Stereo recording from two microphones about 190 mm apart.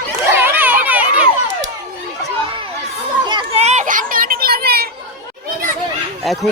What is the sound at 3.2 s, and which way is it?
Children playing, 25° right (ahead or behind).